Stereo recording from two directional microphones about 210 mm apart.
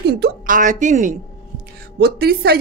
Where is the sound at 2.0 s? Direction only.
50° right (ahead or behind).